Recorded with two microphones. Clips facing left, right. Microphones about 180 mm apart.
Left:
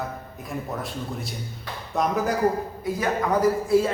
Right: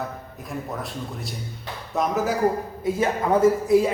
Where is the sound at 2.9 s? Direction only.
25° right (ahead or behind).